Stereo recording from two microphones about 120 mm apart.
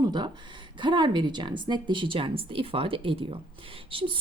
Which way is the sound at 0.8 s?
40° right (ahead or behind).